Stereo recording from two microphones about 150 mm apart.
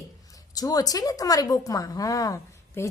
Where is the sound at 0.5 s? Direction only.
25° left (ahead or behind).